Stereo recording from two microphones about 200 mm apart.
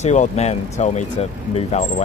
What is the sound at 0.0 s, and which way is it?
Speech, 35° left (ahead or behind).